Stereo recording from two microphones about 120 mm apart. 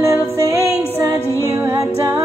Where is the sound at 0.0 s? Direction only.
25° right (ahead or behind).